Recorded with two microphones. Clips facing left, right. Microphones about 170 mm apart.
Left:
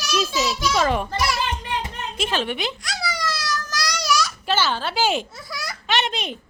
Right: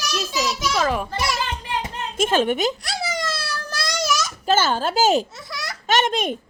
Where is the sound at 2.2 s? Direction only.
45° right (ahead or behind).